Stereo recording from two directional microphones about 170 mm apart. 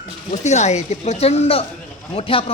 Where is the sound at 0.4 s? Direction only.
45° left (ahead or behind).